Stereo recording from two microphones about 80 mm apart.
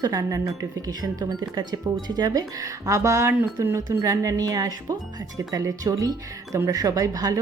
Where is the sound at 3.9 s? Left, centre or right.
Right.